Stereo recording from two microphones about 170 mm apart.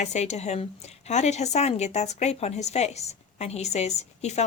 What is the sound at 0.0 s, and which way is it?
A woman's voice, 40° left (ahead or behind).